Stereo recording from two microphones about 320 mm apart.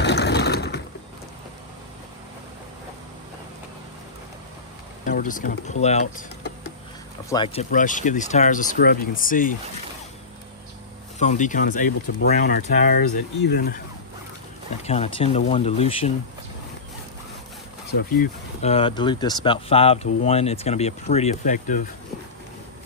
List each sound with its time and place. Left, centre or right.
0.0 s mechanisms: left
5.0 s speech: left
7.2 s speech: centre
11.1 s speech: left
14.9 s speech: centre
18.6 s speech: centre